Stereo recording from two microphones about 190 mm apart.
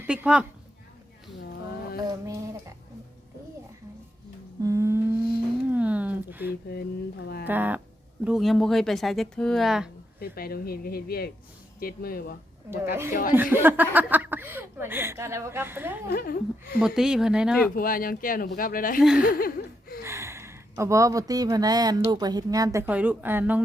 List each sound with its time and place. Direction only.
0.1 s speech: 5° right (ahead or behind)
2.2 s music: 15° right (ahead or behind)
4.6 s humming: 15° right (ahead or behind)
5.7 s a sound: 5° right (ahead or behind)
6.5 s speech: 55° left (ahead or behind)
7.4 s speech: 10° right (ahead or behind)
10.2 s speech: 50° left (ahead or behind)
12.7 s speech: 15° right (ahead or behind)
16.0 s speech: 50° left (ahead or behind)
16.8 s speech: 5° right (ahead or behind)
17.7 s speech: 50° left (ahead or behind)
19.2 s a sound: 50° left (ahead or behind)
20.1 s speech: 15° right (ahead or behind)